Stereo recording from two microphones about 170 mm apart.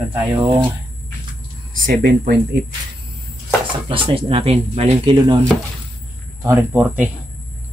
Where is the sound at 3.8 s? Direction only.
30° right (ahead or behind).